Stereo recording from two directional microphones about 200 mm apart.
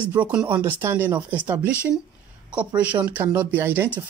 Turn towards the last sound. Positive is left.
turn(degrees=-10)  # may be behind; listen again after turning